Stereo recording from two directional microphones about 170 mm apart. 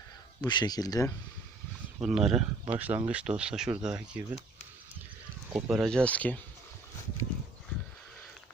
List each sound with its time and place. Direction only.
0.4 s speech: 25° left (ahead or behind)
2.0 s speech: 5° right (ahead or behind)
5.5 s speech: 5° right (ahead or behind)